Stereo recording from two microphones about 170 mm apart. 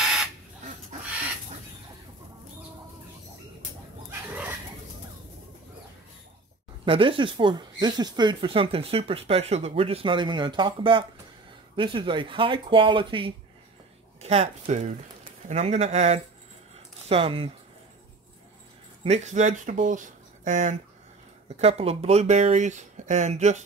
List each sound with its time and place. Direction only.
0.0 s bird: 5° right (ahead or behind)
6.8 s speech: 30° right (ahead or behind)
14.2 s speech: 40° right (ahead or behind)
19.0 s speech: 40° right (ahead or behind)